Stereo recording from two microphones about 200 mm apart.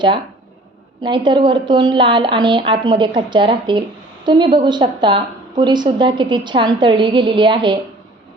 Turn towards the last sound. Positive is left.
turn(degrees=-25)  # may be behind; listen again after turning